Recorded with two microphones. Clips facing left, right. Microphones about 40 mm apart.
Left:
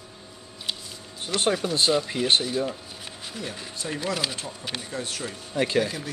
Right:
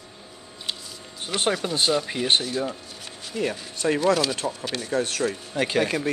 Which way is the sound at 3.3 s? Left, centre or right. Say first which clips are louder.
Right 9 dB; right.